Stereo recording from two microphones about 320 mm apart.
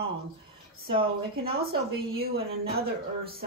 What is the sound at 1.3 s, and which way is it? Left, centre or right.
Speech, right.